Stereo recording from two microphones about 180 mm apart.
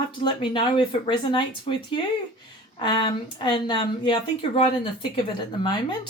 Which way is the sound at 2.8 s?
25° left (ahead or behind).